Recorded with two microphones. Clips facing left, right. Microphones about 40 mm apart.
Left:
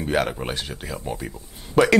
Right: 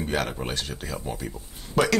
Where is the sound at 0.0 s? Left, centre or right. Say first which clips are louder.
Left 4 dB; centre.